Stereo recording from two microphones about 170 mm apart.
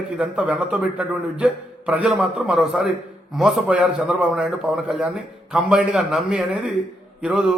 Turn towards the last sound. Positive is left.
turn(degrees=-5)  # may be behind; listen again after turning